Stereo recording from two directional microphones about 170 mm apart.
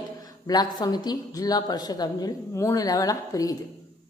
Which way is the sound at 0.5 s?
25° left (ahead or behind).